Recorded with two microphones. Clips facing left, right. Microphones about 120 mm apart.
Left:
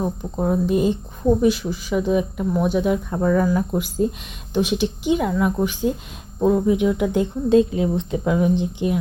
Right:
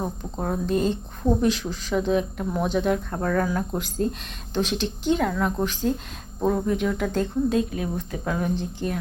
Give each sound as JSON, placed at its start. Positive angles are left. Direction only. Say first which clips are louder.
{"t": 0.3, "sound": "speech", "louder": "left 5 dB", "side_deg": 10}
{"t": 7.5, "sound": "speech", "louder": "left 8 dB", "side_deg": 25}